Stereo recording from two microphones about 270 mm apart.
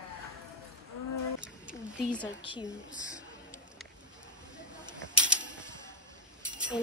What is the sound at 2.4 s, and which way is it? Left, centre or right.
Speech, centre.